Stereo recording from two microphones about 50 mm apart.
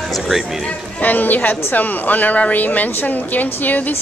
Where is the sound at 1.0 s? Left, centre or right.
Left.